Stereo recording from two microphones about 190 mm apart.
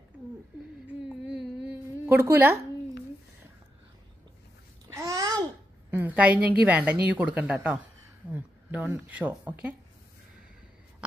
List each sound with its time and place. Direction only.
1.0 s a sound: 5° right (ahead or behind)
4.8 s babbling: 15° right (ahead or behind)
5.9 s a woman's voice: 10° right (ahead or behind)